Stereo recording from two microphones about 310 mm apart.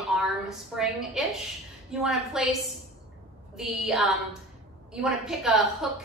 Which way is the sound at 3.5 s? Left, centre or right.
Centre.